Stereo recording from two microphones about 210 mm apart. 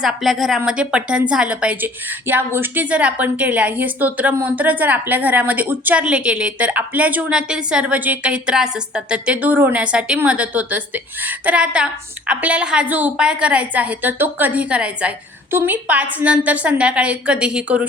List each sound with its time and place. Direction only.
0.0 s a woman's voice: centre (ahead or behind)